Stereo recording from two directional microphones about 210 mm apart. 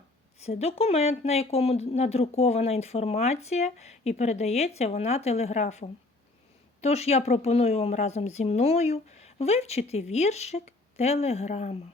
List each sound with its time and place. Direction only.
0.3 s speech: 30° left (ahead or behind)